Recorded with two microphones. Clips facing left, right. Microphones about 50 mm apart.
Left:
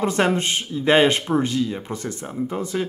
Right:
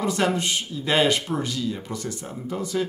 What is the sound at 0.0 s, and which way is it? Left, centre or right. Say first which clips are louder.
Speech: left 3 dB; left.